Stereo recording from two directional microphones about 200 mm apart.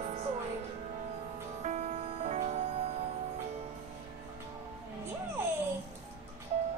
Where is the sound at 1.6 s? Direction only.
35° right (ahead or behind).